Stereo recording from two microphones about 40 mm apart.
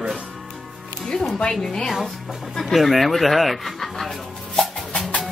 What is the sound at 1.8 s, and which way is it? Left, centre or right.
Speech, centre.